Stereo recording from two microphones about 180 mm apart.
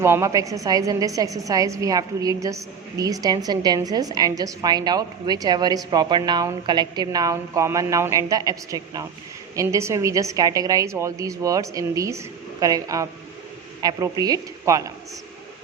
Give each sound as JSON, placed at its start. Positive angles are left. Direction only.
{"t": 0.0, "sound": "a woman's voice", "side_deg": -15}